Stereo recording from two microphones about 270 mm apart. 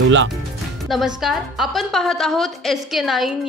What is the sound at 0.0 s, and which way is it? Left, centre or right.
Speech, right.